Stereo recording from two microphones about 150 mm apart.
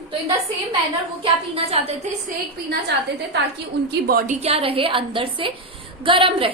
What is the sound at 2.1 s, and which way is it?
Speech, 50° right (ahead or behind).